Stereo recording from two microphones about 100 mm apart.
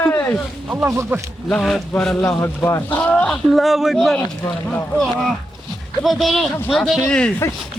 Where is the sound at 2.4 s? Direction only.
25° left (ahead or behind); by 4.2 s 5° left (ahead or behind).